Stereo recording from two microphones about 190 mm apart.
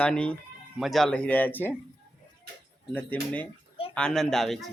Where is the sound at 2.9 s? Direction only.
10° left (ahead or behind).